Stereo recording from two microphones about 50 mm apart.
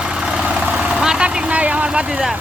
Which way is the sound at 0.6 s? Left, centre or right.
Right.